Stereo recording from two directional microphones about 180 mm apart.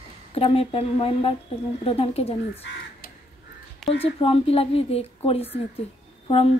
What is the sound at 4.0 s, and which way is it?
A woman's voice, 30° left (ahead or behind).